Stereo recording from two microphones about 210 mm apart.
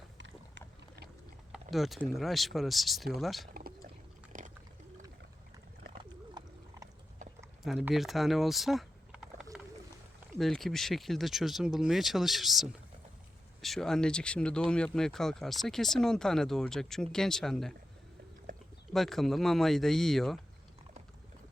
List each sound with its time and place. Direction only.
1.5 s speech: centre (ahead or behind)
4.3 s pour: 40° right (ahead or behind)
6.0 s pig: 20° right (ahead or behind)
7.6 s speech: centre (ahead or behind)
18.9 s speech: centre (ahead or behind)